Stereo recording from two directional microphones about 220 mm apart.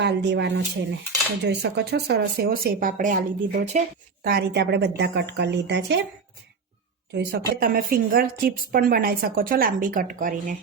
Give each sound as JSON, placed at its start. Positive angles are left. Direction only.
{"t": 0.0, "sound": "speech", "side_deg": -50}
{"t": 7.1, "sound": "a woman's voice", "side_deg": -50}